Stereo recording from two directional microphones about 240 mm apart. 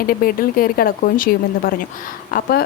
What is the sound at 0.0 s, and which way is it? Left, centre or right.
Speech, left.